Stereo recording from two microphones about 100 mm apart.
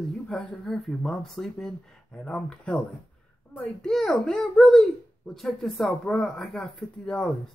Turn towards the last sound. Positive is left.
turn(degrees=5)  # may be behind; listen again after turning